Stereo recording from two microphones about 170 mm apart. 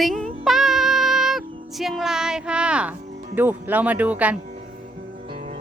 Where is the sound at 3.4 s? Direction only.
10° right (ahead or behind).